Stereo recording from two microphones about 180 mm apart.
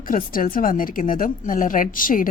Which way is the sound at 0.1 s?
50° left (ahead or behind).